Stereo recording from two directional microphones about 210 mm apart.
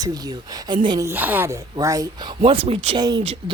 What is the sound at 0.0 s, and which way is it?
A woman's voice, 20° right (ahead or behind).